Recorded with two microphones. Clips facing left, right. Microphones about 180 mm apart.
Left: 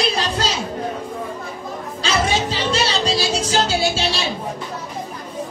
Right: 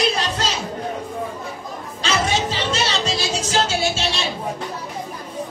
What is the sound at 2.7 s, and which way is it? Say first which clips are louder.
Music: left 6 dB; 30° left (ahead or behind).